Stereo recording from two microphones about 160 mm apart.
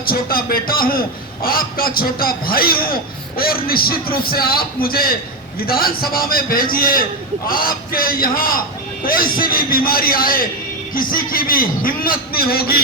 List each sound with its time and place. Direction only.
0.0 s a man's voice: 65° left (ahead or behind)